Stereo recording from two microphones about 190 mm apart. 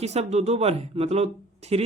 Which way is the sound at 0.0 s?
35° right (ahead or behind).